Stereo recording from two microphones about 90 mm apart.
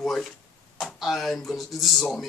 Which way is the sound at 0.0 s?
Centre (ahead or behind).